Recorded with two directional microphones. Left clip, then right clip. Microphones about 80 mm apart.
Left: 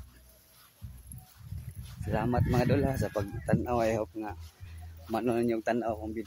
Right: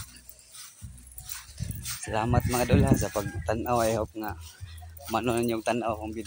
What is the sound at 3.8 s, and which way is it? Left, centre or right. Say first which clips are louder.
Speech: right 3 dB; centre.